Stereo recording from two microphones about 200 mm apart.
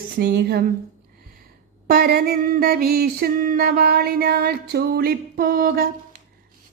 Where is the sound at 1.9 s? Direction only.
50° right (ahead or behind).